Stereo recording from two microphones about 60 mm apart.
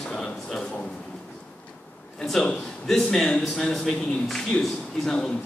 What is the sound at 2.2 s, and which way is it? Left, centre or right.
A man's voice, centre.